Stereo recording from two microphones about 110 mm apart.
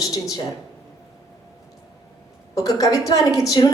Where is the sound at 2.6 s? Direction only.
35° left (ahead or behind).